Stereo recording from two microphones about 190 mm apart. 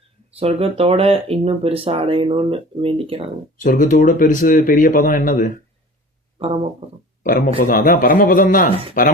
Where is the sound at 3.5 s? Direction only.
45° left (ahead or behind).